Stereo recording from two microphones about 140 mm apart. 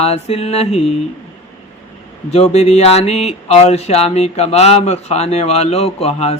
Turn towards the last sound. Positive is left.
turn(degrees=45)  # may be behind; listen again after turning